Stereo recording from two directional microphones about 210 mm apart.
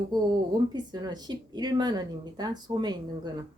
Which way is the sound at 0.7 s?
20° right (ahead or behind).